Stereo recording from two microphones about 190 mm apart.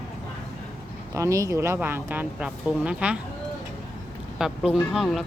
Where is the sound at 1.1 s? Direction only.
15° right (ahead or behind).